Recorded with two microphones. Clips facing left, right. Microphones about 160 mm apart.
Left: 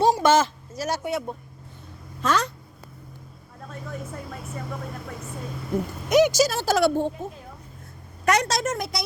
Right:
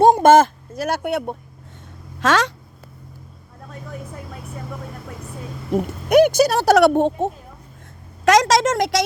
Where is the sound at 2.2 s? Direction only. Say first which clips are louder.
Right 5 dB; 90° right.